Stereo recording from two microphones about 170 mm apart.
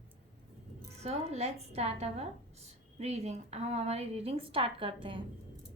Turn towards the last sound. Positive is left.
turn(degrees=-30)  # may be behind; listen again after turning